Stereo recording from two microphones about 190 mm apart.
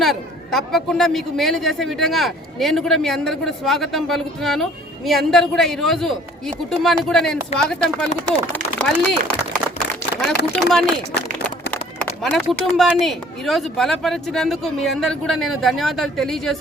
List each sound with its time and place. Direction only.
0.0 s a man's voice: centre (ahead or behind)
11.7 s a sound: 5° left (ahead or behind)
12.7 s a man's voice: centre (ahead or behind)